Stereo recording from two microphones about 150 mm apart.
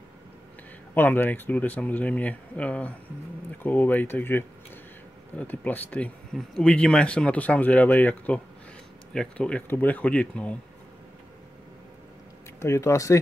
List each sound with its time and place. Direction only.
0.9 s speech: 15° left (ahead or behind)
12.5 s speech: 20° left (ahead or behind)